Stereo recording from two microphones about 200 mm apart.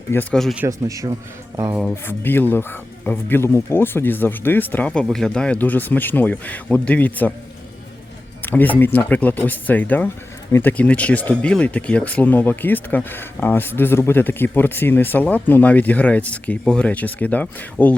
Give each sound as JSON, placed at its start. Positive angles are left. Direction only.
{"t": 0.1, "sound": "speech", "side_deg": 10}
{"t": 0.6, "sound": "speech", "side_deg": -15}
{"t": 2.0, "sound": "speech", "side_deg": 10}
{"t": 8.4, "sound": "speech", "side_deg": 10}